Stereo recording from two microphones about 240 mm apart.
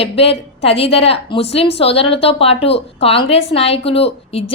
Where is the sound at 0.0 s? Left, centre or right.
Left.